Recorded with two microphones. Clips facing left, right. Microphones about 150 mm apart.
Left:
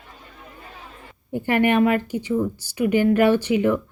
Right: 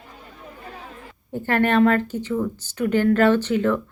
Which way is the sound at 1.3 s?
15° left (ahead or behind).